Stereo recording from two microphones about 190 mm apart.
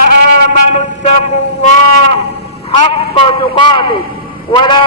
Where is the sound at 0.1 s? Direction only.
60° right (ahead or behind).